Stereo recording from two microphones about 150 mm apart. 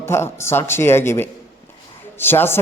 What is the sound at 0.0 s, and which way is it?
A man's voice, 15° left (ahead or behind).